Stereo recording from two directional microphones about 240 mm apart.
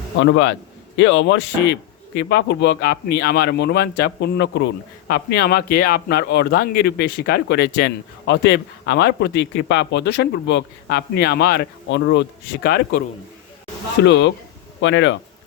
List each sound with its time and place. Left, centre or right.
0.2 s a man's voice: left
14.0 s a man's voice: left